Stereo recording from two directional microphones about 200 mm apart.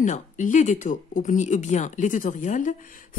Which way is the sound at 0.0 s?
40° left (ahead or behind).